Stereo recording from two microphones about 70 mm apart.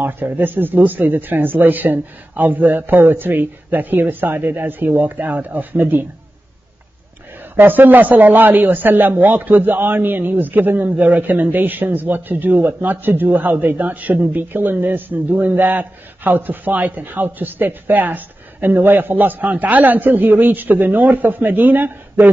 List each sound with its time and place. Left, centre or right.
0.0 s a man's voice: right
7.5 s a man's voice: right